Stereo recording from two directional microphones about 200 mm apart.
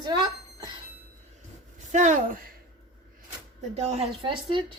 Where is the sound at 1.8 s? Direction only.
40° right (ahead or behind).